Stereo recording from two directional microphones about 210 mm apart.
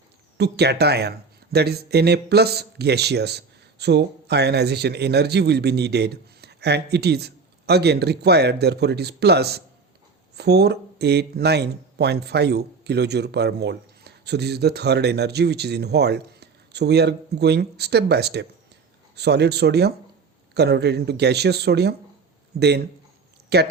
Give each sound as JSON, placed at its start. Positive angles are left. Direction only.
{"t": 0.3, "sound": "speech", "side_deg": -50}